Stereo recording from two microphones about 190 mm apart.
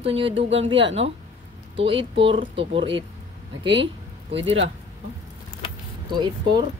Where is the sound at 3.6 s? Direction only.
70° right (ahead or behind).